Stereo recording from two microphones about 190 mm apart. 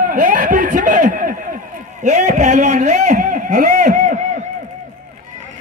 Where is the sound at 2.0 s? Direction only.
35° right (ahead or behind).